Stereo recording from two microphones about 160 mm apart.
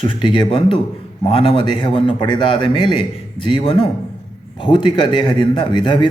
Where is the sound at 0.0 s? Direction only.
30° left (ahead or behind).